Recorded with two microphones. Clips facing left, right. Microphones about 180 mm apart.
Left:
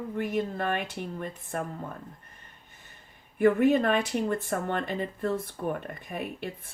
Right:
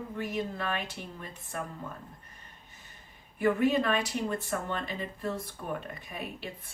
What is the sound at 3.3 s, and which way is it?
Speech, 55° left (ahead or behind).